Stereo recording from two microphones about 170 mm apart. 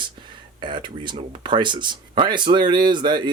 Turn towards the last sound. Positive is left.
turn(degrees=-25)  # may be behind; listen again after turning